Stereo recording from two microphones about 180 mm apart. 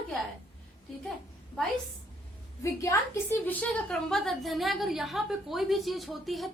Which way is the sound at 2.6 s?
15° left (ahead or behind).